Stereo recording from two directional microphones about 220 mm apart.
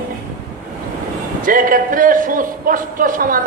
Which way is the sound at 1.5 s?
40° right (ahead or behind).